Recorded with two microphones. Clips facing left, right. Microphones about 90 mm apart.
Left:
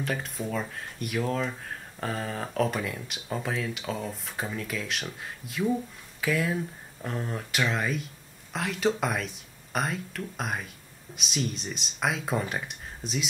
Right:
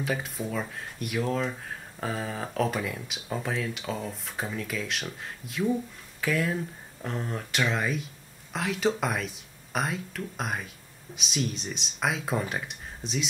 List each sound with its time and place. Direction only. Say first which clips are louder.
0.0 s speech: right 1 dB; 5° right (ahead or behind)